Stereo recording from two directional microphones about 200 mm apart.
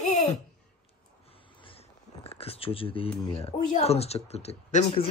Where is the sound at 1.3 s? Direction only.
25° left (ahead or behind).